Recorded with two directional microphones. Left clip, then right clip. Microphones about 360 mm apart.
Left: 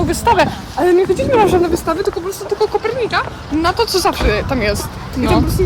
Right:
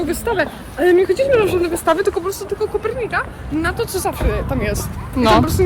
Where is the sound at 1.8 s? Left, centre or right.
Centre.